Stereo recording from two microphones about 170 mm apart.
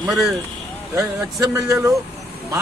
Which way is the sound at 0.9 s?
20° right (ahead or behind).